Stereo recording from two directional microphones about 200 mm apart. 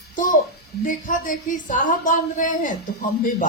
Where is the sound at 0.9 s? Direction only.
40° left (ahead or behind).